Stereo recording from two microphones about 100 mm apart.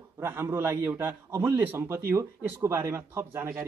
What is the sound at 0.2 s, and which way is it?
A man's voice, 25° right (ahead or behind).